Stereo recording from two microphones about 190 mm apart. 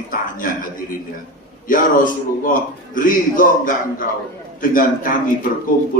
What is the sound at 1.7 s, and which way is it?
A man's voice, 45° left (ahead or behind).